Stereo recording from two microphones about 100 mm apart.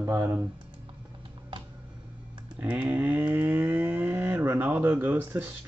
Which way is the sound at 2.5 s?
15° right (ahead or behind).